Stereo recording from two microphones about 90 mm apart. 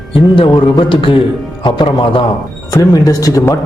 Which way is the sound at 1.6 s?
55° left (ahead or behind).